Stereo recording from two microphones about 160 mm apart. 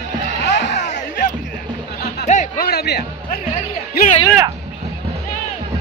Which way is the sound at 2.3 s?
50° left (ahead or behind).